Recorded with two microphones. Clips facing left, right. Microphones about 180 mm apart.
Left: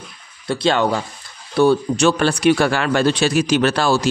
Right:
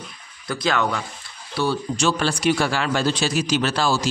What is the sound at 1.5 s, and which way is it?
Speech, 55° left (ahead or behind).